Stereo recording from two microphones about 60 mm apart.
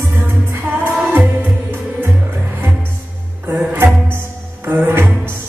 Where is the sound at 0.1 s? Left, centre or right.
Right.